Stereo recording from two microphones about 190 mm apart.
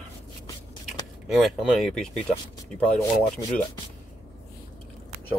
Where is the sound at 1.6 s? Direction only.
Centre (ahead or behind).